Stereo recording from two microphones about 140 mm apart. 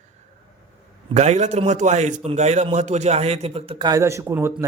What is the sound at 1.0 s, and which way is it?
A man's voice, 50° right (ahead or behind).